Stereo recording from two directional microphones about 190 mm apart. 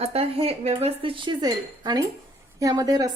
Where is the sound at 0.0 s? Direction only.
30° right (ahead or behind).